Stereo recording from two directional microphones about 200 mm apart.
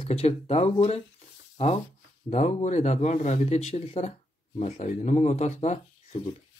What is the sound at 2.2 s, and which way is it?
Speech, 35° left (ahead or behind).